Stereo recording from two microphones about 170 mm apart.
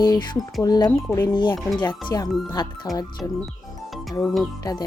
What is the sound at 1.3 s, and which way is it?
Speech, 25° left (ahead or behind).